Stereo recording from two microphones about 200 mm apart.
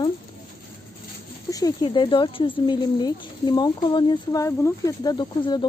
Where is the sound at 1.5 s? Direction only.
20° left (ahead or behind).